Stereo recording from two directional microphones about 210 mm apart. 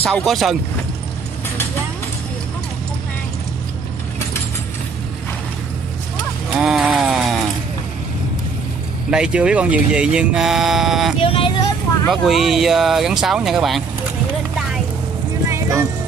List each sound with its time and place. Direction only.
0.0 s speech: 5° left (ahead or behind)
6.6 s a sound: centre (ahead or behind)
9.1 s speech: 5° right (ahead or behind)
11.1 s speech: 25° left (ahead or behind)
12.1 s speech: centre (ahead or behind)
15.5 s music: 15° right (ahead or behind)